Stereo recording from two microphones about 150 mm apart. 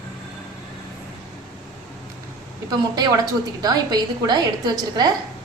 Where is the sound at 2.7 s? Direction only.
25° right (ahead or behind).